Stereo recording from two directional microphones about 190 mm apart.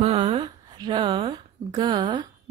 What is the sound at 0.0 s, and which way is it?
A woman's voice, 30° right (ahead or behind).